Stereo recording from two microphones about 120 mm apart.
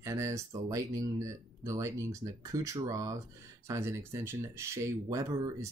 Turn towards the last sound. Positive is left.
turn(degrees=-25)  # may be behind; listen again after turning